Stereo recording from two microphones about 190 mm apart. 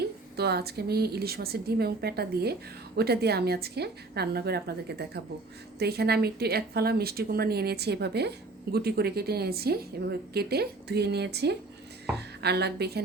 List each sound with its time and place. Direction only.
0.3 s speech: 60° right (ahead or behind)